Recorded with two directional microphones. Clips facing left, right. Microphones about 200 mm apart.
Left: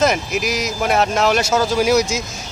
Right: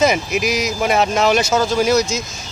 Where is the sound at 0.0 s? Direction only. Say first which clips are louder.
Right 1 dB; centre (ahead or behind).